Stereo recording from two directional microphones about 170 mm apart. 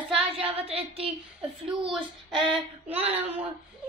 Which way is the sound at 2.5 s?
35° right (ahead or behind).